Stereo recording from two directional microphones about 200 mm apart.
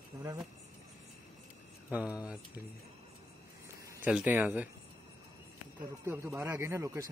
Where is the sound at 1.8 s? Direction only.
5° right (ahead or behind).